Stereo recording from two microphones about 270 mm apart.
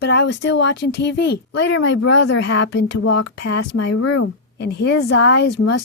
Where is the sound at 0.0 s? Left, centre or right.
Left.